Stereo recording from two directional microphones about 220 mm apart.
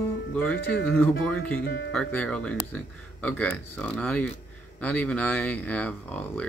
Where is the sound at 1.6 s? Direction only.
55° left (ahead or behind).